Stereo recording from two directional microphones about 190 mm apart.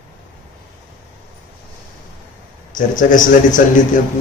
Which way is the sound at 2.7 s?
45° left (ahead or behind).